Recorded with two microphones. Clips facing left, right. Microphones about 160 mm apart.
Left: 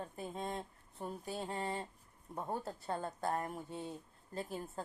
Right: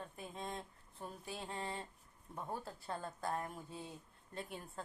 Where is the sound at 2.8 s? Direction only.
25° left (ahead or behind).